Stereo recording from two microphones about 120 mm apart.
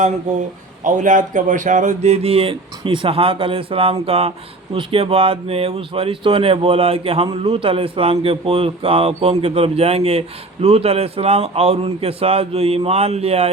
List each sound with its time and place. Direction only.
0.9 s speech: 90° right; by 13.5 s 60° right (ahead or behind)